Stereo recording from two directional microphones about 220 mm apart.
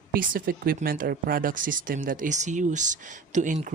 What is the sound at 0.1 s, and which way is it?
A woman's voice, 40° right (ahead or behind).